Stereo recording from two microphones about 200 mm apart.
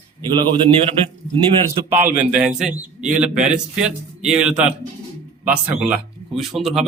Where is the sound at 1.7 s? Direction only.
35° right (ahead or behind).